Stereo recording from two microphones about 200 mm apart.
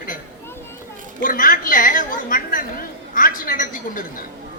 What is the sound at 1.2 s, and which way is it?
A woman's voice, 40° left (ahead or behind).